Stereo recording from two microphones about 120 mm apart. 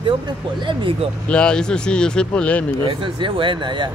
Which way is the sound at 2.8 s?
45° right (ahead or behind).